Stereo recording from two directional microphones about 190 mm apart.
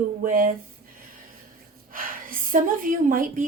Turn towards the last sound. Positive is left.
turn(degrees=-45)  # may be behind; listen again after turning